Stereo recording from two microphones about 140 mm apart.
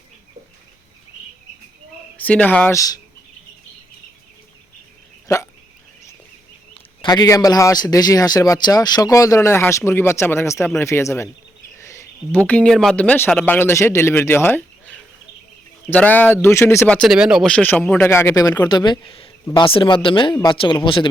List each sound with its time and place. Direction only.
2.1 s speech: 10° left (ahead or behind)
2.7 s a man's voice: 25° left (ahead or behind)
7.0 s a man's voice: 30° left (ahead or behind)
11.8 s a sound: 20° left (ahead or behind)
12.4 s a man's voice: 10° left (ahead or behind)
17.1 s speech: 5° right (ahead or behind)
17.4 s speech: 10° left (ahead or behind); by 21.1 s 35° left (ahead or behind)